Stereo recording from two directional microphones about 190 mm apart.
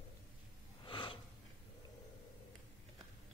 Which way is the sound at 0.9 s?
25° left (ahead or behind).